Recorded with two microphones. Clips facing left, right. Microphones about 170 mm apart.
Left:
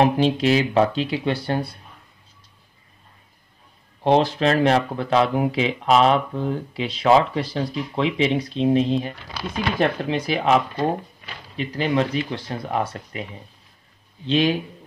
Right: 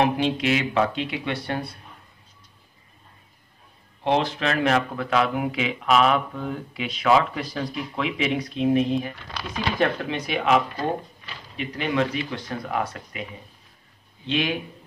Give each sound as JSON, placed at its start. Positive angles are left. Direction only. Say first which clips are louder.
{"t": 0.0, "sound": "speech", "louder": "left 4 dB", "side_deg": 35}
{"t": 4.0, "sound": "speech", "louder": "left 5 dB", "side_deg": 35}
{"t": 14.2, "sound": "speech", "louder": "left 5 dB", "side_deg": 35}